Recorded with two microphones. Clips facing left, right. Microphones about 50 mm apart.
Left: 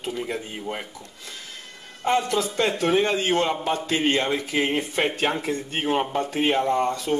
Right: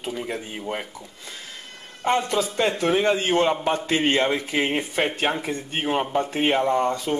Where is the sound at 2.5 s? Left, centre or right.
Centre.